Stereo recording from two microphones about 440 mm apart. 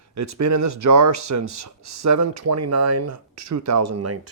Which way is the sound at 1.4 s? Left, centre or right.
Right.